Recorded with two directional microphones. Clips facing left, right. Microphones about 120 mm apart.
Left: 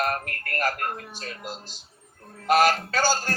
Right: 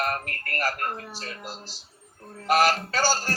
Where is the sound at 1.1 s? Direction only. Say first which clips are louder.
Left 1 dB; 15° left (ahead or behind).